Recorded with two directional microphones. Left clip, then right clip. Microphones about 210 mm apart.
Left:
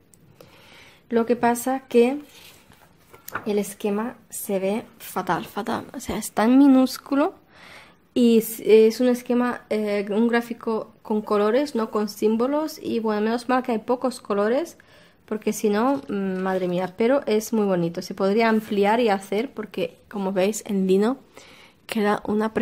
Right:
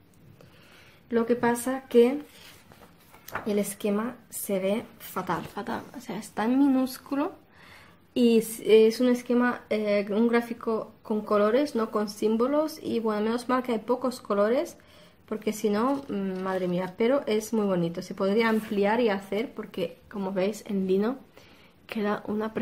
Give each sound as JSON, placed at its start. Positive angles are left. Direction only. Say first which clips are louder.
{"t": 1.1, "sound": "a woman's voice", "louder": "left 4 dB", "side_deg": 45}
{"t": 3.4, "sound": "a woman's voice", "louder": "left 3 dB", "side_deg": 40}